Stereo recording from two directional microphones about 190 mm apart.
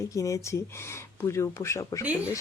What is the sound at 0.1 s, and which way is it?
Speech, 15° left (ahead or behind).